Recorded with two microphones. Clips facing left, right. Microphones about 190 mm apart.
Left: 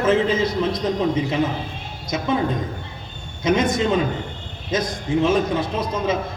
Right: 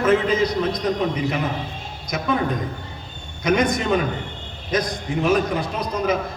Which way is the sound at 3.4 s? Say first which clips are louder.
Even; 25° left (ahead or behind).